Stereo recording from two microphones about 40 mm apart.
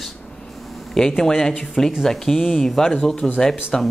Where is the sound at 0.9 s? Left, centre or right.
Centre.